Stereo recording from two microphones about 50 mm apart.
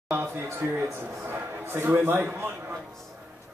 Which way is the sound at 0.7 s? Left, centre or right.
Right.